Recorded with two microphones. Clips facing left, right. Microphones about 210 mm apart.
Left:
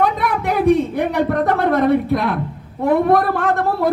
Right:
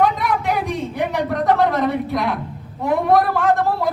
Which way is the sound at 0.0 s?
55° left (ahead or behind).